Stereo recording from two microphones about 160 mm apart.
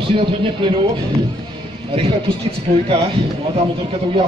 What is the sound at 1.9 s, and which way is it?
Speech, 35° right (ahead or behind).